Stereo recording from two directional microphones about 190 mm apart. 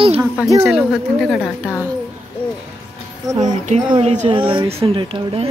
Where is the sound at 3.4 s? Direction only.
40° right (ahead or behind).